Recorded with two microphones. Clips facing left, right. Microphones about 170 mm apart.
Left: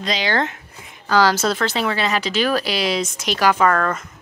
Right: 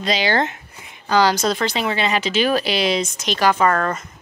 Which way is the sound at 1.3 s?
15° right (ahead or behind).